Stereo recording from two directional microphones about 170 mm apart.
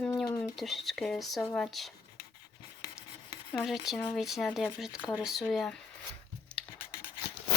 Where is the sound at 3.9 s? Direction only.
10° left (ahead or behind).